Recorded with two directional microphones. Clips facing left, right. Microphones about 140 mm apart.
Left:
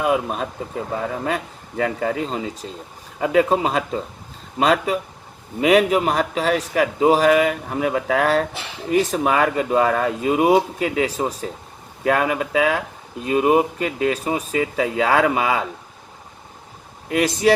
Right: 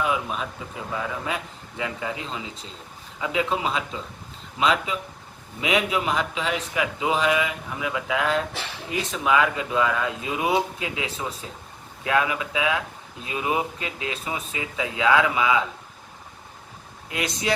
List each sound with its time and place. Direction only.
0.0 s a man's voice: 45° left (ahead or behind)